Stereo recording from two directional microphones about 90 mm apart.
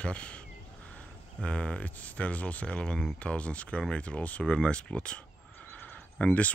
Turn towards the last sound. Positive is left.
turn(degrees=15)  # may be behind; listen again after turning